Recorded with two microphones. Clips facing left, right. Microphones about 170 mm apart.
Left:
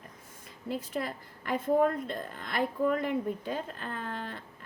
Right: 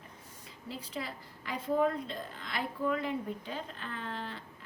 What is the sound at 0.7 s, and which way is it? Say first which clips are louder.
A woman's voice: left 6 dB; 50° left (ahead or behind).